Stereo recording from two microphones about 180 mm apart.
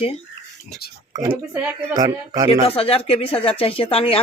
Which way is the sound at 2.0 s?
20° right (ahead or behind).